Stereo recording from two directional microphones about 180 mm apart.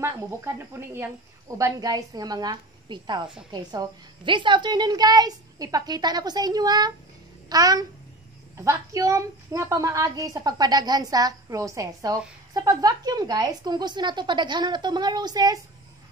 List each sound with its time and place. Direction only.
0.0 s a woman's voice: 15° right (ahead or behind)